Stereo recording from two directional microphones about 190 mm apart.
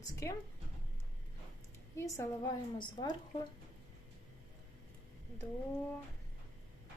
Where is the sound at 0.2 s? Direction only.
15° left (ahead or behind).